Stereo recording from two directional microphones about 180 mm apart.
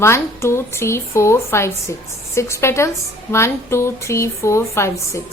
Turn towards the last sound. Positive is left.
turn(degrees=15)  # may be behind; listen again after turning